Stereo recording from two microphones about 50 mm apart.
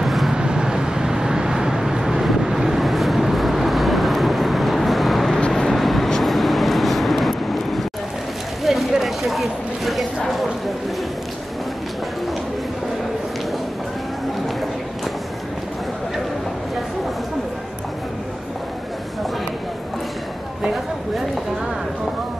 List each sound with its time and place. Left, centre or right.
0.0 s vehicle: centre
0.3 s vehicle: centre
8.6 s a sound: centre